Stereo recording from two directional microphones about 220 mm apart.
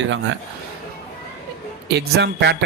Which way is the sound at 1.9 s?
50° right (ahead or behind).